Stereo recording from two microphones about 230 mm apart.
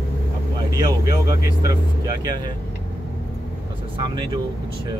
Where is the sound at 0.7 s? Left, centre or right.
Centre.